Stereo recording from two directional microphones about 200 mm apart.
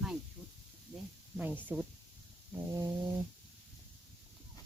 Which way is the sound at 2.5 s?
15° right (ahead or behind).